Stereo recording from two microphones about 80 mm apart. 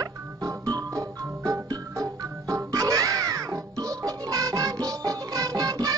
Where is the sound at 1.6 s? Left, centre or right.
Right.